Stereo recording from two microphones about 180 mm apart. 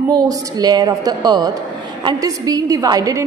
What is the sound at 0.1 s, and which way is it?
A woman's voice, 20° right (ahead or behind).